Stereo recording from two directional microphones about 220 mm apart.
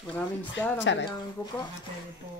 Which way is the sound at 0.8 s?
55° left (ahead or behind).